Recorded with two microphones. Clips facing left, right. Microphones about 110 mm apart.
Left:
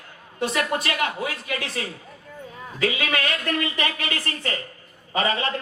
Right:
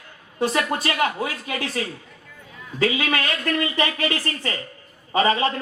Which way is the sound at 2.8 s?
35° right (ahead or behind).